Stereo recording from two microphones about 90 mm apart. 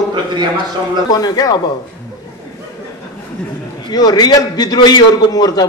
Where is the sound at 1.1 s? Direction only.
45° left (ahead or behind).